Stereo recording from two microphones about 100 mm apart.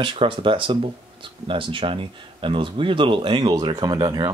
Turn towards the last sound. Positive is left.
turn(degrees=-45)  # may be behind; listen again after turning